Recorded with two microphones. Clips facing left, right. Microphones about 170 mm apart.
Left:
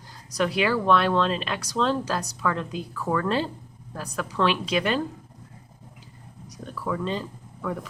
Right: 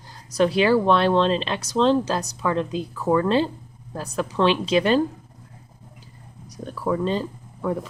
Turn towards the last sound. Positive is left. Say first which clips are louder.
# right 5 dB
turn(degrees=-30)  # may be behind; listen again after turning